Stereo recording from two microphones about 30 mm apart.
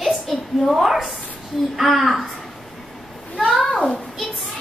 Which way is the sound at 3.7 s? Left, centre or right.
Left.